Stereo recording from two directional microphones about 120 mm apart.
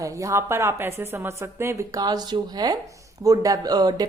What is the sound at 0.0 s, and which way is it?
A woman's voice, 25° right (ahead or behind).